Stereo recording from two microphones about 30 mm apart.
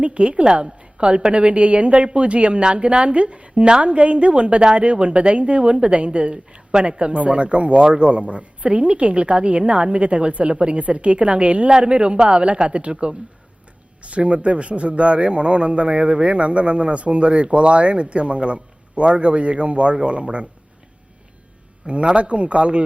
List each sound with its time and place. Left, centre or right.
0.0 s a woman's voice: right
0.8 s a sound: right
1.3 s a woman's voice: right
10.5 s a woman's voice: right
10.8 s a man's voice: right
22.1 s a man's voice: right